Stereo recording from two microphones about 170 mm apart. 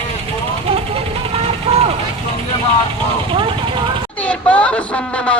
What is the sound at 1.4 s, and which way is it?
Vehicle, 35° right (ahead or behind).